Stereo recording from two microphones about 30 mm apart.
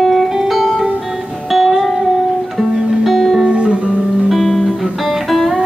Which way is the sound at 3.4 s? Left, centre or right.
Right.